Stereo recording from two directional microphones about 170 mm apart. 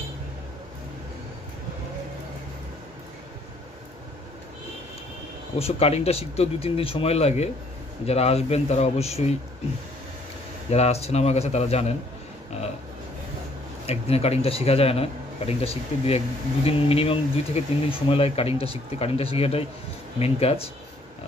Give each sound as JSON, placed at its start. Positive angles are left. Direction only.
{"t": 5.6, "sound": "speech", "side_deg": 35}
{"t": 10.7, "sound": "speech", "side_deg": 40}
{"t": 13.8, "sound": "speech", "side_deg": 35}